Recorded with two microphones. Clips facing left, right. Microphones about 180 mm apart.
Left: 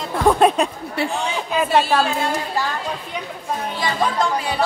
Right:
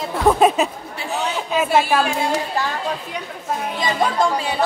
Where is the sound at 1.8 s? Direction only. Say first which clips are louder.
Even; 15° right (ahead or behind).